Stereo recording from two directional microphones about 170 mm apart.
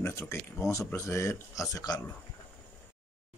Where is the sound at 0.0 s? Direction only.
15° left (ahead or behind).